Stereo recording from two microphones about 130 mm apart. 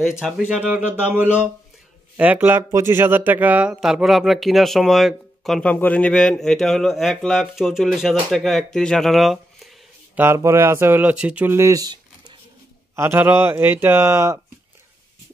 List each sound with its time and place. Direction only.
0.2 s speech: 5° right (ahead or behind)
10.1 s speech: 20° right (ahead or behind)
12.9 s speech: 20° right (ahead or behind)